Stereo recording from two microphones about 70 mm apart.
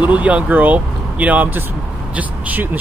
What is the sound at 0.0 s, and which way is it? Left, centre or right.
Speech, centre.